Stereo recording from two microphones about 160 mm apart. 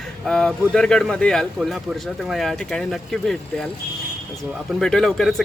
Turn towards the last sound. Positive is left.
turn(degrees=0)  # may be behind; listen again after turning